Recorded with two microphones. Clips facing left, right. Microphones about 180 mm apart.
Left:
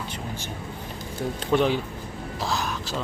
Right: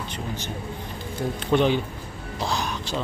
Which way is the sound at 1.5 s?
5° left (ahead or behind).